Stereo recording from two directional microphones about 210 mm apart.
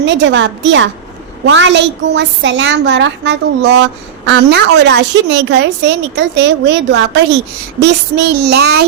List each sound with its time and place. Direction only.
0.0 s a woman's voice: 60° right (ahead or behind)